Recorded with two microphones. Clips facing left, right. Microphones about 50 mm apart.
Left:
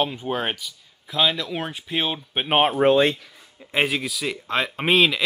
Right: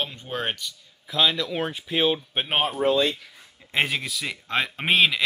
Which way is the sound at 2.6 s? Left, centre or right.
Left.